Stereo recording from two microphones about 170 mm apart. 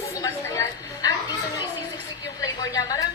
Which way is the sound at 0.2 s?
20° left (ahead or behind).